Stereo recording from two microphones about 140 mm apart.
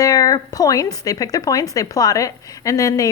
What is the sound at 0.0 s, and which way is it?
Speech, 25° left (ahead or behind).